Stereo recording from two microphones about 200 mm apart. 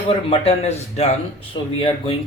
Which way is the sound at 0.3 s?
30° left (ahead or behind).